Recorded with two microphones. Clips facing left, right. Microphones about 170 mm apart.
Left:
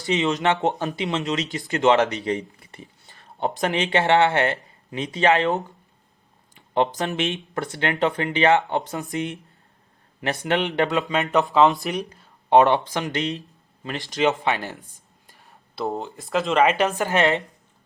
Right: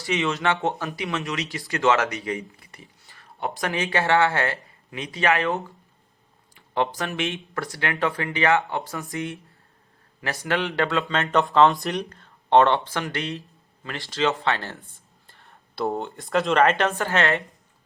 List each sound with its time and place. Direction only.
0.0 s speech: 20° left (ahead or behind)
6.7 s speech: 20° left (ahead or behind)
15.7 s speech: centre (ahead or behind); by 17.4 s 15° left (ahead or behind)